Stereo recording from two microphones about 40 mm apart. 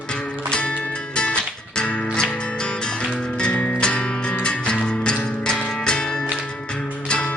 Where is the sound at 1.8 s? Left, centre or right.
Left.